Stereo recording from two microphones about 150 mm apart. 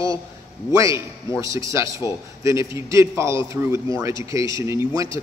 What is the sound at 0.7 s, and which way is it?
A man's voice, 20° right (ahead or behind).